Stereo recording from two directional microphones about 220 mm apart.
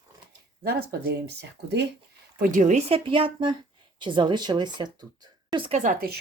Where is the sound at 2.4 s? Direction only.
35° right (ahead or behind).